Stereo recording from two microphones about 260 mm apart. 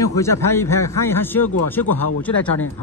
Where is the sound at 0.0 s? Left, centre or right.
Centre.